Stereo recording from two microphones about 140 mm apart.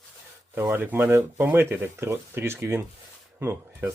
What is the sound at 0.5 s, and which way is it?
Speech, 15° right (ahead or behind).